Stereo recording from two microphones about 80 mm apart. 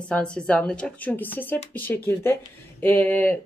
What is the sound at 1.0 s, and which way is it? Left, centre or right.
A woman's voice, left.